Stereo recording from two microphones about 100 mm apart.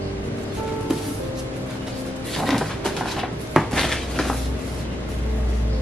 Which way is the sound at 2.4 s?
Centre (ahead or behind).